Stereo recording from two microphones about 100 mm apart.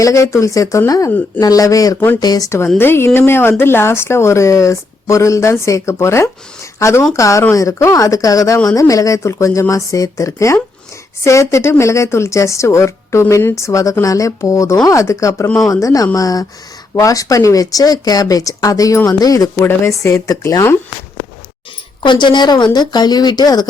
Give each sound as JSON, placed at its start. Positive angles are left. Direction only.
{"t": 0.0, "sound": "speech", "side_deg": 30}
{"t": 2.7, "sound": "speech", "side_deg": 25}
{"t": 22.0, "sound": "speech", "side_deg": 50}